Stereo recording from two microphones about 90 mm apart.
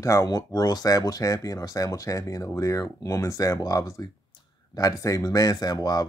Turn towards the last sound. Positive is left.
turn(degrees=45)  # may be behind; listen again after turning